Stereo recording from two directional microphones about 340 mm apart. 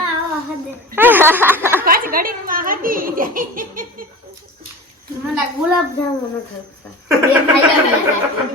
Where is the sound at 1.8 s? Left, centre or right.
Right.